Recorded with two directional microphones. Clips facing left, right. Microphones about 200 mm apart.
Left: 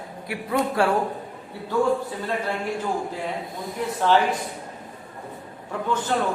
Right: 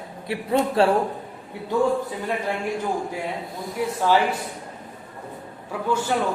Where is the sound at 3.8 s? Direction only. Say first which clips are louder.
Right 3 dB; 10° right (ahead or behind).